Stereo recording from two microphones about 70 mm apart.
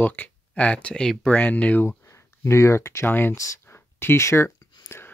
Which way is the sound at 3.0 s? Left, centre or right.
Left.